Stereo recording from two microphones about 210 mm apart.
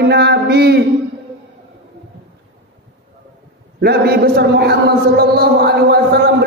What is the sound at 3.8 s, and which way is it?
A man's voice, 50° right (ahead or behind).